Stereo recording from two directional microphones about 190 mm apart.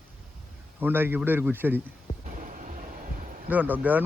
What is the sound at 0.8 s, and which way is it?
Speech, 10° right (ahead or behind).